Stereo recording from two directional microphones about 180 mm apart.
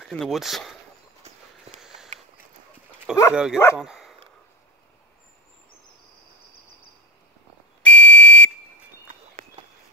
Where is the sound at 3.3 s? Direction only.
5° right (ahead or behind).